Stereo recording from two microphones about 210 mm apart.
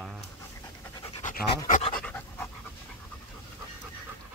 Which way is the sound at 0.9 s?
25° left (ahead or behind).